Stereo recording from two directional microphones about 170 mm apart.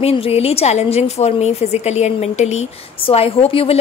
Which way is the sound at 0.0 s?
35° left (ahead or behind).